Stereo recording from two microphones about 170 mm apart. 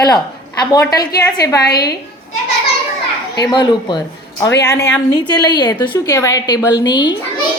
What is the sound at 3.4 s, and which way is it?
A woman's voice, 25° left (ahead or behind).